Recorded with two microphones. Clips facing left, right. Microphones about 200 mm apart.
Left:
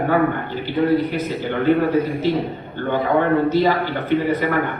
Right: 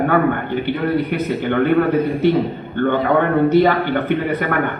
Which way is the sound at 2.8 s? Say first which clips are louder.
Right 3 dB; 60° right (ahead or behind).